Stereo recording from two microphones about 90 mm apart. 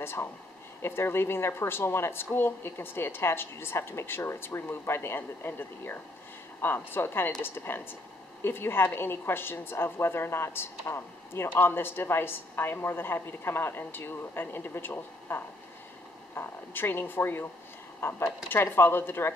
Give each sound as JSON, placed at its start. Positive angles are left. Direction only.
{"t": 0.0, "sound": "a woman's voice", "side_deg": 25}